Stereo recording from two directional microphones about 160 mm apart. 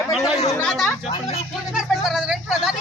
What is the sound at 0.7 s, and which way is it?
A man's voice, centre (ahead or behind).